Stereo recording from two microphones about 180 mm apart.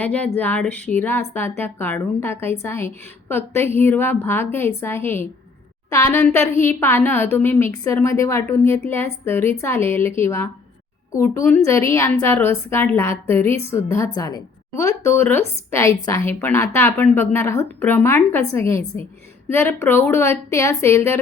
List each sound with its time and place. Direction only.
0.0 s a woman's voice: 10° left (ahead or behind)